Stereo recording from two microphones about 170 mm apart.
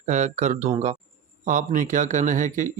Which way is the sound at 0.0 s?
45° right (ahead or behind).